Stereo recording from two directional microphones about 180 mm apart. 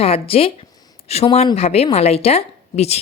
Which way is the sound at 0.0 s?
35° left (ahead or behind).